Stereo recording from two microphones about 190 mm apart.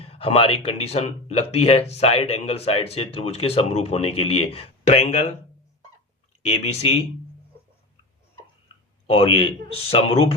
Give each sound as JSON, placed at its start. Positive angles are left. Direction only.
{"t": 0.0, "sound": "speech", "side_deg": 30}
{"t": 6.4, "sound": "speech", "side_deg": 35}
{"t": 9.0, "sound": "speech", "side_deg": 30}